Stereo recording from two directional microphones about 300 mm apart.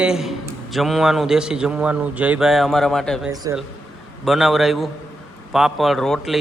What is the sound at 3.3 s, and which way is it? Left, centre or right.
Speech, centre.